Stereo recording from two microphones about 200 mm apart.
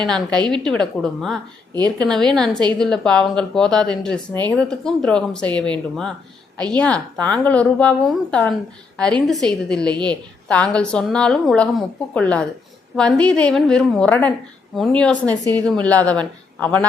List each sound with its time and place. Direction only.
0.1 s speech: 5° left (ahead or behind)
1.7 s a woman's voice: 20° right (ahead or behind)
2.0 s a woman's voice: 5° left (ahead or behind)